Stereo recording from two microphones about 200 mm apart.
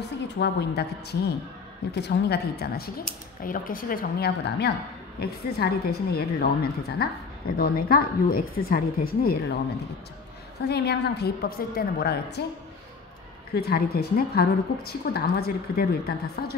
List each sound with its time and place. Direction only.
0.4 s a woman's voice: 55° left (ahead or behind)
10.7 s a woman's voice: 55° left (ahead or behind)
13.6 s a woman's voice: 50° left (ahead or behind)